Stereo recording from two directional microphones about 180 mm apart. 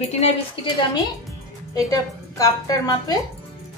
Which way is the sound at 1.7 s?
20° left (ahead or behind).